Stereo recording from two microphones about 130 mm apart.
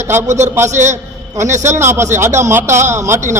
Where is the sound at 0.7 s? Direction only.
65° right (ahead or behind).